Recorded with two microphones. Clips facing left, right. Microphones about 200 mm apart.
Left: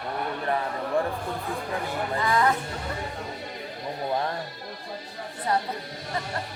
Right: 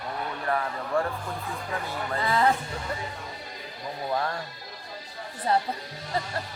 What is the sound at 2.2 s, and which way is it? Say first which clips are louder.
Speech: even; 30° right (ahead or behind).